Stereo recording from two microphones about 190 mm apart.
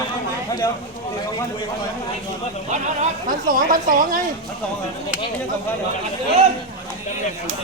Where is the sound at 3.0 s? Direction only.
45° right (ahead or behind).